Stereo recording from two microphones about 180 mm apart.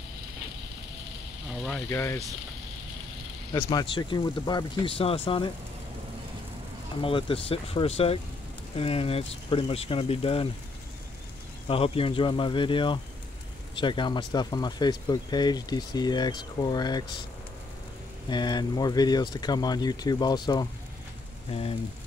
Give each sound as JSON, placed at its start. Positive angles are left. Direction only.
{"t": 1.9, "sound": "speech", "side_deg": 15}
{"t": 3.6, "sound": "speech", "side_deg": 25}
{"t": 7.0, "sound": "speech", "side_deg": 30}
{"t": 11.6, "sound": "speech", "side_deg": 30}
{"t": 18.3, "sound": "speech", "side_deg": 25}